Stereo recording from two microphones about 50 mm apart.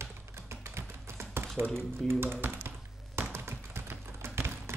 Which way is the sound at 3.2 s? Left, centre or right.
Right.